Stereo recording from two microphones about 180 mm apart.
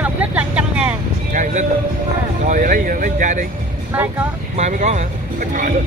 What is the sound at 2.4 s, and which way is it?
Speech, 45° right (ahead or behind).